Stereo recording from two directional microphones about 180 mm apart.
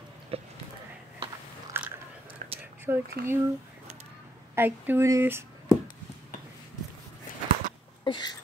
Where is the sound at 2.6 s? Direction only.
10° right (ahead or behind).